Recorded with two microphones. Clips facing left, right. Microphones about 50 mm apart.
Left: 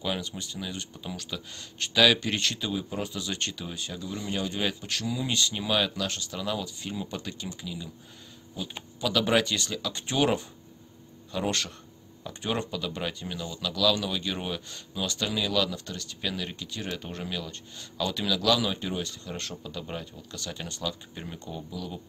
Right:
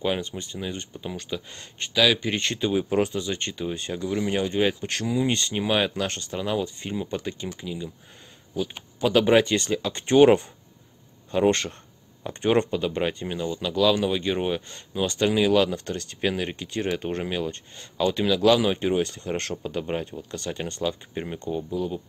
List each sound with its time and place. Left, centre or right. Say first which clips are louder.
0.0 s speech: right 5 dB; right
3.2 s speech: right 5 dB; right
3.7 s speech: right 8 dB; right
4.8 s speech: right 6 dB; right
12.3 s speech: right 9 dB; right